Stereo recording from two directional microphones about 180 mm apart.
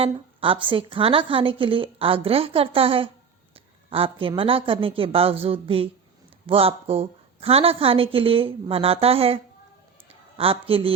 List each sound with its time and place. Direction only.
0.0 s a woman's voice: 30° right (ahead or behind)